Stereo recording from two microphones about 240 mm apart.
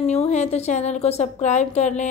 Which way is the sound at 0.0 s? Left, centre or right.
Left.